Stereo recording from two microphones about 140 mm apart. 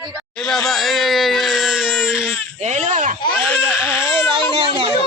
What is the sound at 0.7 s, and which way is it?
Baby cry, centre (ahead or behind).